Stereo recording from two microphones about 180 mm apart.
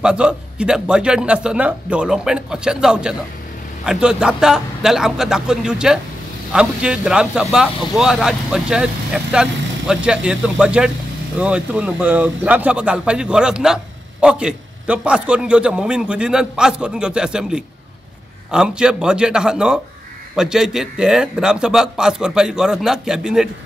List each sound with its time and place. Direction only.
0.0 s speech: 5° right (ahead or behind)